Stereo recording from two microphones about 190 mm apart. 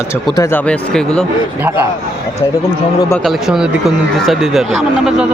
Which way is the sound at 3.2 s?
Centre (ahead or behind).